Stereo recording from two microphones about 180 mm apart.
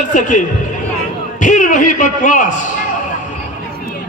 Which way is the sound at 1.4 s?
45° left (ahead or behind).